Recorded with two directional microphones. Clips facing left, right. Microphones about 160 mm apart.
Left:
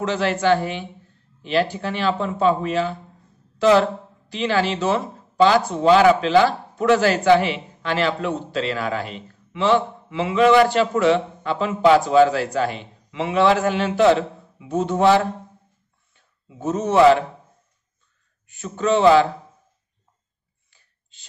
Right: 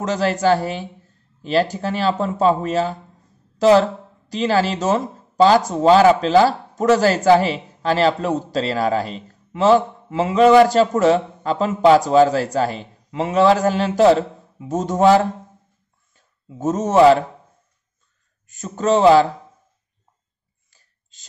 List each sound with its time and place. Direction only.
0.0 s a man's voice: 40° right (ahead or behind)
18.5 s a man's voice: 40° right (ahead or behind)
20.7 s a sound: 40° right (ahead or behind)